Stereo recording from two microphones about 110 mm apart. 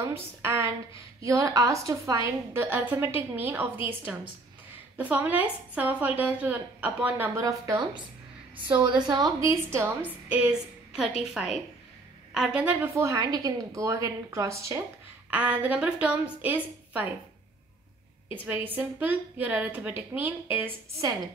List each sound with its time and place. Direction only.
0.0 s a woman's voice: 25° right (ahead or behind)
7.3 s a woman's voice: 30° right (ahead or behind)
8.8 s a woman's voice: 45° right (ahead or behind); by 10.1 s 25° right (ahead or behind)
10.2 s a woman's voice: 10° right (ahead or behind)
12.7 s a woman's voice: 20° right (ahead or behind)
15.2 s a woman's voice: 15° right (ahead or behind)
18.3 s a woman's voice: 15° right (ahead or behind)